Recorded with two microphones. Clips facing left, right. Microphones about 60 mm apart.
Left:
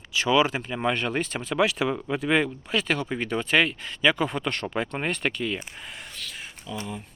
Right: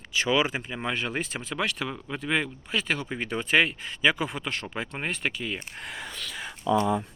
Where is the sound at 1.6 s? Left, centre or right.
Centre.